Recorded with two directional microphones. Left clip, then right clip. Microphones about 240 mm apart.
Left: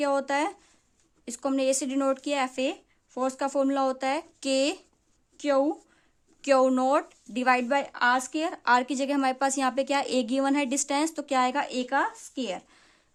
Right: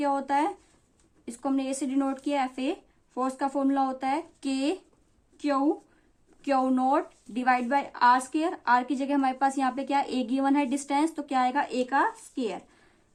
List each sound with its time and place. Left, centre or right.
0.0 s speech: left